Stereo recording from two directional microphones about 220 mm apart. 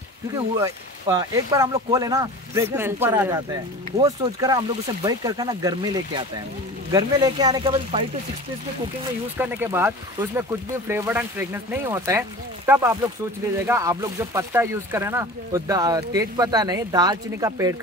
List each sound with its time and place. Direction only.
0.6 s speech: 15° right (ahead or behind)
9.4 s speech: 10° right (ahead or behind)